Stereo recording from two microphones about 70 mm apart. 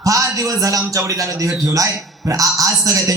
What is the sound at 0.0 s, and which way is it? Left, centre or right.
Speech, right.